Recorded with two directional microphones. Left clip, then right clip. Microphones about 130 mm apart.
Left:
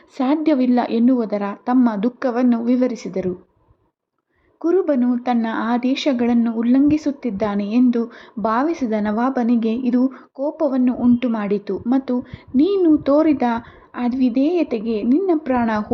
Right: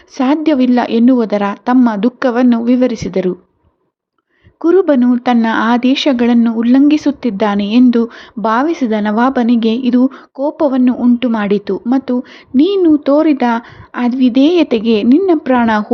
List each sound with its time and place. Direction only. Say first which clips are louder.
0.2 s speech: right 6 dB; 20° right (ahead or behind)
4.6 s speech: right 8 dB; 30° right (ahead or behind)
9.1 s speech: right 9 dB; 35° right (ahead or behind)